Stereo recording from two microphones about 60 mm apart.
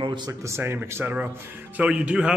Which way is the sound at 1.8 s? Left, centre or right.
Right.